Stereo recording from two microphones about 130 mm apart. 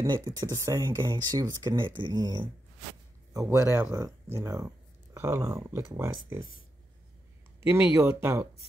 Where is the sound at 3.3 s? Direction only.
25° right (ahead or behind).